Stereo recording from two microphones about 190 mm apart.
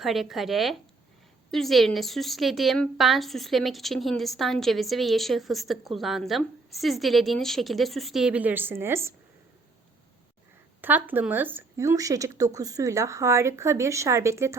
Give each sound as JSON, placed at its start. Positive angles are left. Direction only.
{"t": 0.0, "sound": "a woman's voice", "side_deg": 0}
{"t": 10.8, "sound": "a woman's voice", "side_deg": -10}